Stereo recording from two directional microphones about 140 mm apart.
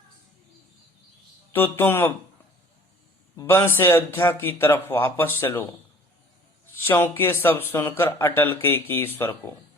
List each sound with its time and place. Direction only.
1.5 s speech: 15° left (ahead or behind)
3.3 s speech: 15° left (ahead or behind)
6.8 s speech: 15° left (ahead or behind)